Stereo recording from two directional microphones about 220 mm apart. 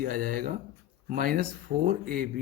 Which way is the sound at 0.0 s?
40° right (ahead or behind).